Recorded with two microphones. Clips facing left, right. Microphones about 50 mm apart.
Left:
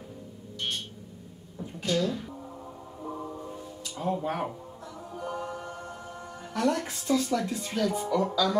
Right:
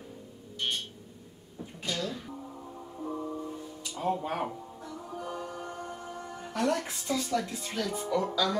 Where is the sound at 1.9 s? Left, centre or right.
Left.